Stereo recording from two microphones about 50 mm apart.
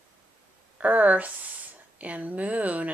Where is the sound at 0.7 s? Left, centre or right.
Right.